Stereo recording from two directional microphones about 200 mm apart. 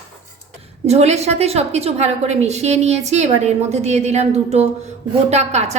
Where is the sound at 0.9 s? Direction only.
35° right (ahead or behind).